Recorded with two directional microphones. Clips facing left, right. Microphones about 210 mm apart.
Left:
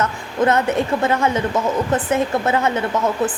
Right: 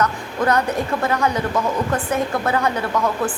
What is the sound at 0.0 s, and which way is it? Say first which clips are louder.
A woman's voice: left 2 dB; 25° left (ahead or behind).